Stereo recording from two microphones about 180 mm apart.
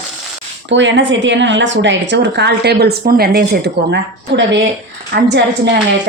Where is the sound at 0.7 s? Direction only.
90° right.